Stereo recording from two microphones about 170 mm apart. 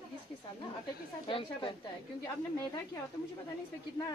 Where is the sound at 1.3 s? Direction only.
30° left (ahead or behind).